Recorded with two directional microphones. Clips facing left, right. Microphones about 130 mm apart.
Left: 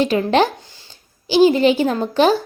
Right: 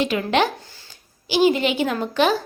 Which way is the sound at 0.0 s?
35° left (ahead or behind).